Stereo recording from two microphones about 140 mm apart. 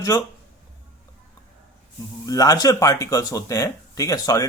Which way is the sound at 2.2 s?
25° left (ahead or behind).